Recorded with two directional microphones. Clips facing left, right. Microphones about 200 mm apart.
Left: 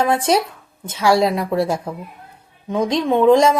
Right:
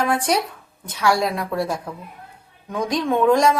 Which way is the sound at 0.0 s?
25° left (ahead or behind).